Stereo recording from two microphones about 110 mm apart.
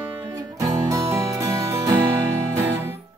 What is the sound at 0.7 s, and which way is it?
Music, 30° right (ahead or behind).